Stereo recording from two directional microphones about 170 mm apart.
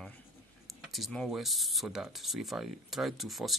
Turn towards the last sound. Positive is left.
turn(degrees=0)  # may be behind; listen again after turning